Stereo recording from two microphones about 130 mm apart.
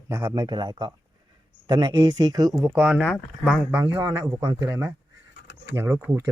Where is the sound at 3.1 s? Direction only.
Centre (ahead or behind).